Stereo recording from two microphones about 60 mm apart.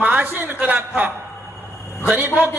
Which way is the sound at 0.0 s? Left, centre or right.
Right.